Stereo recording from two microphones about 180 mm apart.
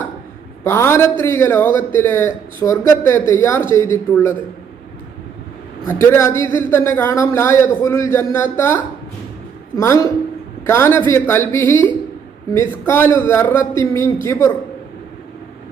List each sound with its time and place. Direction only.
0.6 s a man's voice: 15° left (ahead or behind)
5.9 s a man's voice: 15° left (ahead or behind)